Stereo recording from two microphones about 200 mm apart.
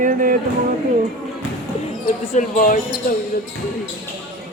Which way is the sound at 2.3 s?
40° left (ahead or behind).